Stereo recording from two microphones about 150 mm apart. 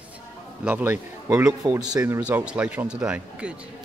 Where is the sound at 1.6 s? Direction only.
25° right (ahead or behind).